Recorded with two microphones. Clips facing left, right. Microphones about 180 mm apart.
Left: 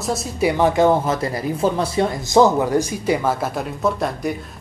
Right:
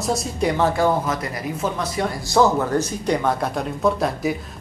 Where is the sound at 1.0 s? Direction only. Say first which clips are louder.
Left 4 dB; 30° left (ahead or behind).